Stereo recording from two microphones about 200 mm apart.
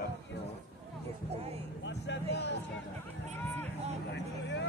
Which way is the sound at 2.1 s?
60° left (ahead or behind).